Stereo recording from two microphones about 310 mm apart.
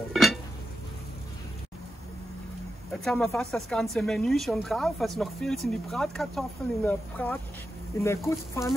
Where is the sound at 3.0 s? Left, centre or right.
Centre.